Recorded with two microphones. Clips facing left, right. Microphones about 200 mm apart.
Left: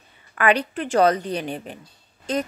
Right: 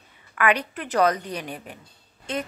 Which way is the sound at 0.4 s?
30° left (ahead or behind).